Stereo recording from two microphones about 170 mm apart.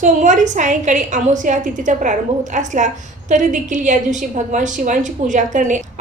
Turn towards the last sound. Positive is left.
turn(degrees=-50)  # may be behind; listen again after turning